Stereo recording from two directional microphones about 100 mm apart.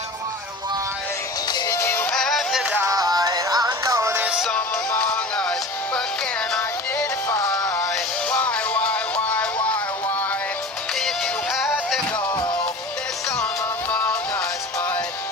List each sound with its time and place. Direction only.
1.5 s music: 30° left (ahead or behind)
2.1 s music: 5° left (ahead or behind)
2.6 s music: 20° right (ahead or behind)
2.9 s synthetic singing: 40° right (ahead or behind)
4.5 s music: 10° left (ahead or behind)
7.0 s music: 30° left (ahead or behind)
7.9 s music: 10° left (ahead or behind)
11.0 s music: centre (ahead or behind)
13.4 s music: 15° left (ahead or behind)